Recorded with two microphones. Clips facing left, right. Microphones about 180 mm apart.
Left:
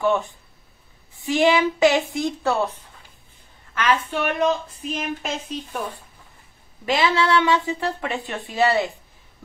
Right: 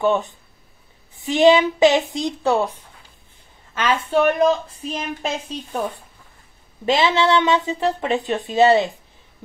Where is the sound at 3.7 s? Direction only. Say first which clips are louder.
Right 2 dB; 25° right (ahead or behind).